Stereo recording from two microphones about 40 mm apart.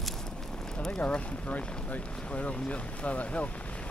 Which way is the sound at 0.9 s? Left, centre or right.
Left.